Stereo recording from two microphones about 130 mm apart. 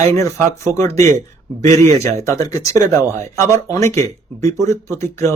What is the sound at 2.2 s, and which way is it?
Speech, 25° left (ahead or behind).